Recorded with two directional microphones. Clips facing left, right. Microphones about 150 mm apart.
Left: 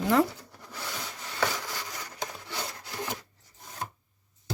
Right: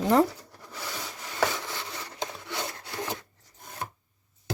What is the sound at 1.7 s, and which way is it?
Wood, 25° right (ahead or behind).